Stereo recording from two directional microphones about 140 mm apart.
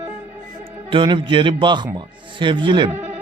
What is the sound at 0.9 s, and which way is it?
A man's voice, 35° right (ahead or behind).